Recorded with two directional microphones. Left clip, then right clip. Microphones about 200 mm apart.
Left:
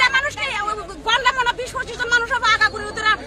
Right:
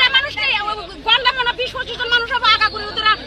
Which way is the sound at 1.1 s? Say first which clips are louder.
Right 2 dB; 15° left (ahead or behind).